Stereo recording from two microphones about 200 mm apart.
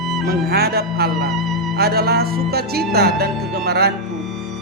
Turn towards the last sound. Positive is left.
turn(degrees=-55)  # may be behind; listen again after turning